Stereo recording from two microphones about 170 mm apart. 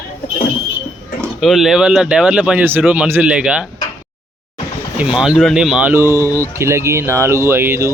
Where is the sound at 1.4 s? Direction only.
Centre (ahead or behind).